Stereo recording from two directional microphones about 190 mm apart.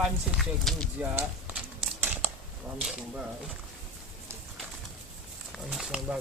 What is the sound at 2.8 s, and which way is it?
Speech, 5° right (ahead or behind).